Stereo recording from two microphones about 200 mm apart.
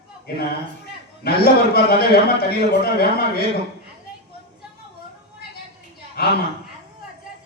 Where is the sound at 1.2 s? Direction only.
50° left (ahead or behind).